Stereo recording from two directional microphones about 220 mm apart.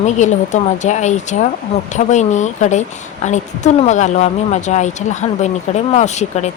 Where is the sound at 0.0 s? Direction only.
35° left (ahead or behind).